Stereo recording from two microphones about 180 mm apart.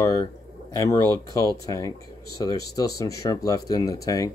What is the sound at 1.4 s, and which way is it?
Speech, 20° left (ahead or behind).